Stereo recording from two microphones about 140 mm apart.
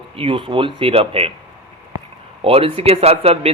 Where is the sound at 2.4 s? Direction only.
40° right (ahead or behind).